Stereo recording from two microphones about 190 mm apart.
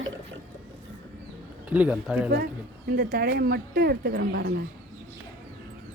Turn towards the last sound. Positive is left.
turn(degrees=-55)  # may be behind; listen again after turning